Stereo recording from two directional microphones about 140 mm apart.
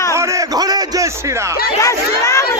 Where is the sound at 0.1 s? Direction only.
25° right (ahead or behind).